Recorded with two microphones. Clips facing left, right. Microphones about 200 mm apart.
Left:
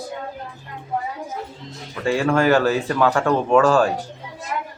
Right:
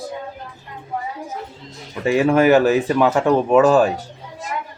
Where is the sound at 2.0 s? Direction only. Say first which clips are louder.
Right 3 dB; 20° right (ahead or behind).